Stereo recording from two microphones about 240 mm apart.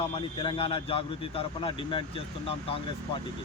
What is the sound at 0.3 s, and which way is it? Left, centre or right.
Speech, left.